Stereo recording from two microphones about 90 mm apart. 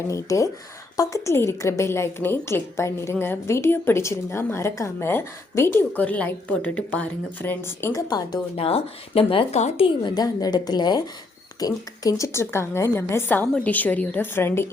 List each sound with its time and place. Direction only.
0.1 s a woman's voice: 35° left (ahead or behind)
8.0 s a woman's voice: 50° left (ahead or behind)
8.6 s speech: 90° left
10.2 s a woman's voice: 45° left (ahead or behind)
12.0 s a woman's voice: 35° left (ahead or behind)